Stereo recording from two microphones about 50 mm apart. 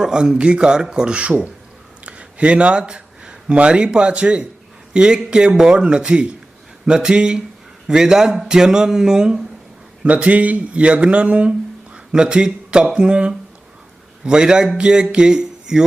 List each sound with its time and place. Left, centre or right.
0.0 s speech: centre
14.8 s music: centre